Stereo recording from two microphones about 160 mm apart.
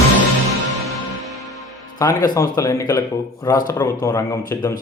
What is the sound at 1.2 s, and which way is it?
Music, centre (ahead or behind).